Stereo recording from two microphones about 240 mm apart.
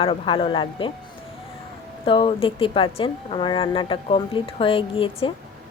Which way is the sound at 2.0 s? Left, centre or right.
Left.